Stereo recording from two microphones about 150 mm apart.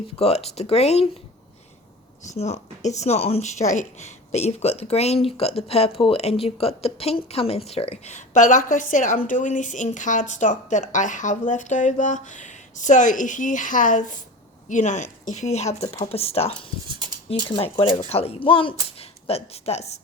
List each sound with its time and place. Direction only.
0.2 s speech: 45° left (ahead or behind)
2.2 s speech: 50° left (ahead or behind)
17.6 s speech: 40° left (ahead or behind)